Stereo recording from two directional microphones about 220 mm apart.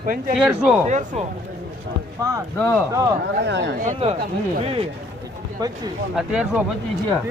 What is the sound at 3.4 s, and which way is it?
Speech, 50° right (ahead or behind).